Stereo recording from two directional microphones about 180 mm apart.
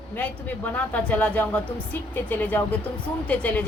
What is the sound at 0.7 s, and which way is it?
A woman's voice, 5° left (ahead or behind).